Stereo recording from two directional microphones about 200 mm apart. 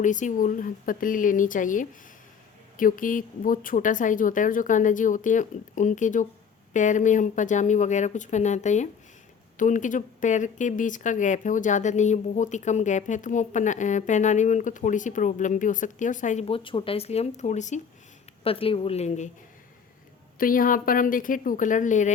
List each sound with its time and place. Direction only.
0.0 s a woman's voice: 40° left (ahead or behind)
20.4 s speech: 45° left (ahead or behind)